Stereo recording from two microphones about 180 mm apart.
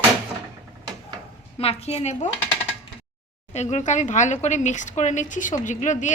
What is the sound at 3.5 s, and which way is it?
Speech, 40° left (ahead or behind).